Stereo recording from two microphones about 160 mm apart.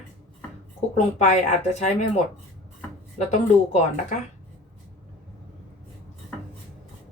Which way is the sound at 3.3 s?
50° left (ahead or behind).